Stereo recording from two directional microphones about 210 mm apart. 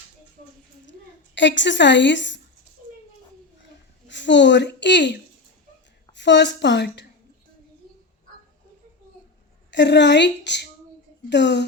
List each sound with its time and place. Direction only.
1.4 s a woman's voice: 60° left (ahead or behind)
4.1 s a woman's voice: 60° left (ahead or behind)
9.7 s a woman's voice: 55° left (ahead or behind)